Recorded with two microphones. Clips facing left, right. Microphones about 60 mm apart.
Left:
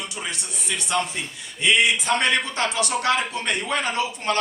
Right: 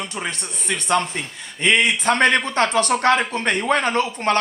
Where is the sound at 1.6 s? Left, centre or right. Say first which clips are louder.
Right 2 dB; right.